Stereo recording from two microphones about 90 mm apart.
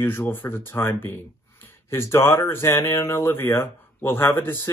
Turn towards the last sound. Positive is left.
turn(degrees=25)  # may be behind; listen again after turning